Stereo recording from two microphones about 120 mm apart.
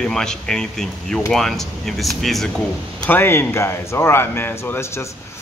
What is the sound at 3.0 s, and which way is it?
Speech, 15° left (ahead or behind).